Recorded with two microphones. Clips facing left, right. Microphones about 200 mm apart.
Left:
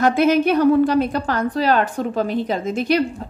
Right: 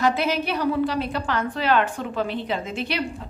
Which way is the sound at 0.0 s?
50° left (ahead or behind).